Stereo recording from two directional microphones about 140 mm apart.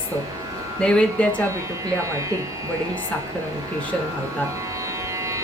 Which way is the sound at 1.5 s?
20° right (ahead or behind).